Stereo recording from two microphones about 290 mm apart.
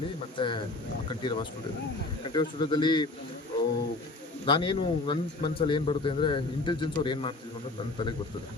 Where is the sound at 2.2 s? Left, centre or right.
Centre.